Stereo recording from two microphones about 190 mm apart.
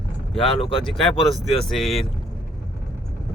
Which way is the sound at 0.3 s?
30° left (ahead or behind).